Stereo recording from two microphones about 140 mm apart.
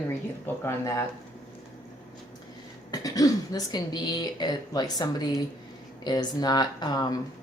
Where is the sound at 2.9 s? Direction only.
25° left (ahead or behind).